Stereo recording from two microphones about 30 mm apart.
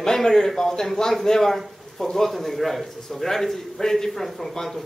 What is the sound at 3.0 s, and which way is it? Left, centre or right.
A man's voice, centre.